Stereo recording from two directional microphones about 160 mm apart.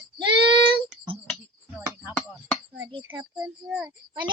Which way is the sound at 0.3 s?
30° right (ahead or behind).